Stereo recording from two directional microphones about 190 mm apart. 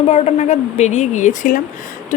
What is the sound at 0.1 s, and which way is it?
Speech, 35° left (ahead or behind).